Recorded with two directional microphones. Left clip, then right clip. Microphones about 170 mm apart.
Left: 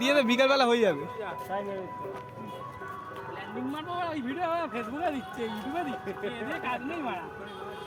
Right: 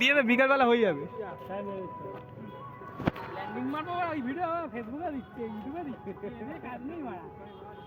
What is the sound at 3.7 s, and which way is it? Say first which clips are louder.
Speech: right 1 dB; 5° left (ahead or behind).